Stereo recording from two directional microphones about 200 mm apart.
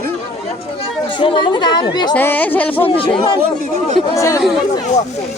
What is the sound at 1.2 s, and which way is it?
Speech, 25° left (ahead or behind).